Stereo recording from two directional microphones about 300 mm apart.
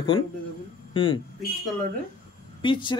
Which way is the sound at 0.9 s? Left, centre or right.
Centre.